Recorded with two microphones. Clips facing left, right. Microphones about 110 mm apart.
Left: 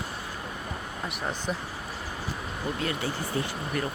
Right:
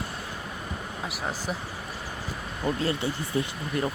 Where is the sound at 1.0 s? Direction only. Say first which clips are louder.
Left 1 dB; centre (ahead or behind).